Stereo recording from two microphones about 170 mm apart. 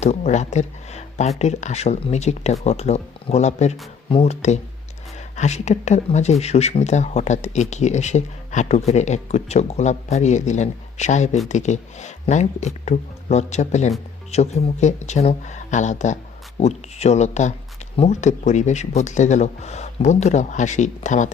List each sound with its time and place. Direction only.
0.0 s speech: 40° left (ahead or behind)